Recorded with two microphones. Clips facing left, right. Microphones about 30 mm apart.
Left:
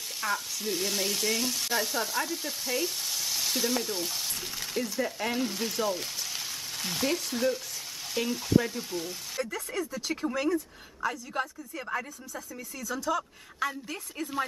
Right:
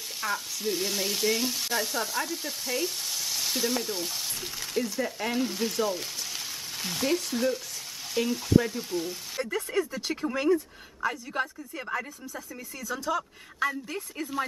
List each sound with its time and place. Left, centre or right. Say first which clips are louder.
0.2 s frying: right 1 dB; centre
9.4 s speech: right 4 dB; centre
13.7 s frying: right 3 dB; centre